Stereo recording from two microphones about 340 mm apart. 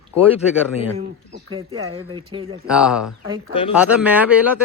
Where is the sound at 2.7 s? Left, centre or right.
Centre.